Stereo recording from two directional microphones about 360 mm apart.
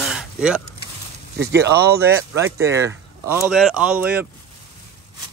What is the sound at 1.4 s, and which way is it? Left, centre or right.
Speech, right.